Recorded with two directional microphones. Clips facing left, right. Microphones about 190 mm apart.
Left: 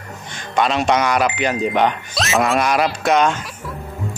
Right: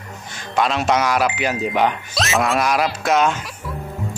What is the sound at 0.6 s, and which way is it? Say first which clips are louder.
A man's voice: left 1 dB; centre (ahead or behind).